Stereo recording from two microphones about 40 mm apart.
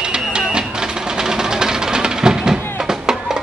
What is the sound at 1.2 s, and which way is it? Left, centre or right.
Music, centre.